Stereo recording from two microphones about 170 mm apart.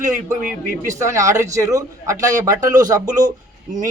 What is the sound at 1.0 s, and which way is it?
A man's voice, 20° right (ahead or behind).